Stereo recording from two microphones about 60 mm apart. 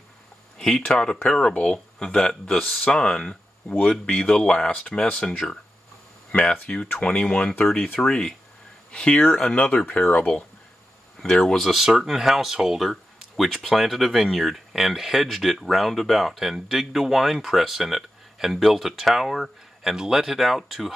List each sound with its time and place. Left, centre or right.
0.6 s speech: centre
6.6 s speech: centre
11.2 s speech: centre